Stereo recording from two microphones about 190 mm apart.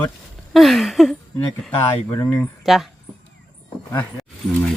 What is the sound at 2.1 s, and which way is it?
Speech, 15° left (ahead or behind).